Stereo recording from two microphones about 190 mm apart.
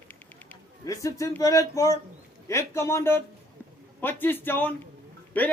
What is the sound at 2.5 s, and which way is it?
A man's voice, 15° left (ahead or behind).